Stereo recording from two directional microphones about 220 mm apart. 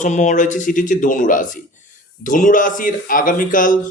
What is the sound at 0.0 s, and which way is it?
Speech, 35° left (ahead or behind).